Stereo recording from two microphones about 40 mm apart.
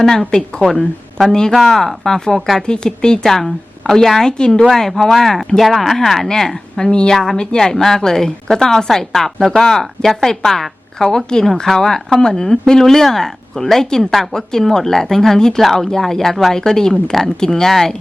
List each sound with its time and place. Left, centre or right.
0.0 s speech: centre
0.6 s speech: centre
2.6 s speech: centre
3.2 s speech: centre
4.7 s speech: centre
7.1 s speech: centre